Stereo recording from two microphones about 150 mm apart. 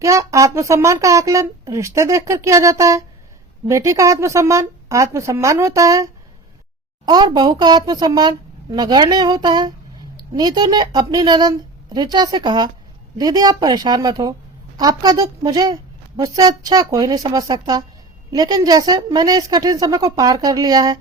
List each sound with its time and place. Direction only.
0.0 s speech: 20° right (ahead or behind)